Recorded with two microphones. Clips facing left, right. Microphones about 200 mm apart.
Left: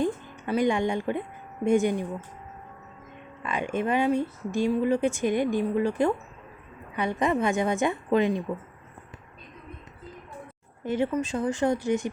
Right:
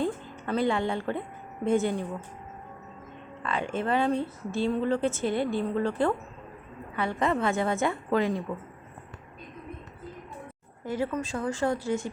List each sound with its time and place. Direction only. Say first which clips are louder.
0.0 s a sound: left 2 dB; 15° left (ahead or behind)
1.6 s speech: left 3 dB; 15° left (ahead or behind)
3.4 s speech: left 2 dB; 15° left (ahead or behind)
10.8 s speech: left 4 dB; 20° left (ahead or behind)